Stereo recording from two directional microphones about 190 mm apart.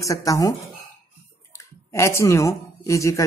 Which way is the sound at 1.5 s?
15° left (ahead or behind).